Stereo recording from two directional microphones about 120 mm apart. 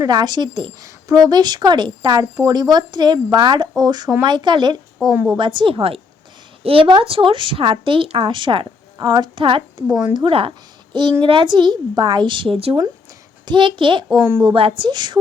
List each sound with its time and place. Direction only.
0.0 s speech: 35° right (ahead or behind)
5.1 s a woman's voice: 15° right (ahead or behind)
5.4 s speech: 40° right (ahead or behind)
13.4 s speech: 40° right (ahead or behind)